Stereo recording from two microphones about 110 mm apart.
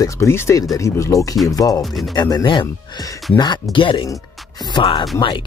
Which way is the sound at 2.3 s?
45° left (ahead or behind).